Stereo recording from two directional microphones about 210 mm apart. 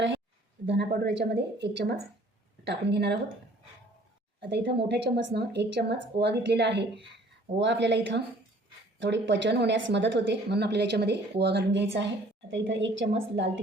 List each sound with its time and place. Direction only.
0.6 s a woman's voice: 55° right (ahead or behind)
4.4 s a woman's voice: 50° right (ahead or behind)